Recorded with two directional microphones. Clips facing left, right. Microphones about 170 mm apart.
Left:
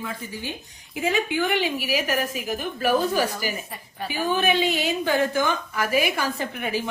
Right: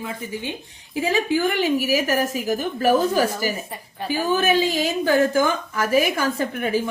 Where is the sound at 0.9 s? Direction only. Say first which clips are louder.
Right 3 dB; 35° right (ahead or behind).